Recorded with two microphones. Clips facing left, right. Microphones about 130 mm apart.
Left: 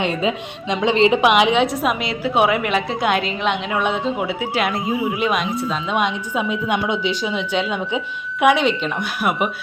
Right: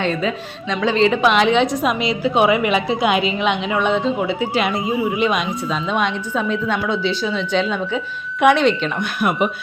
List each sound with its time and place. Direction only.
0.0 s a woman's voice: 20° left (ahead or behind)